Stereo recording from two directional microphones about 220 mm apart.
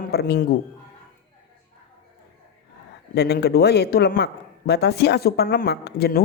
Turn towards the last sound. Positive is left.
turn(degrees=45)  # may be behind; listen again after turning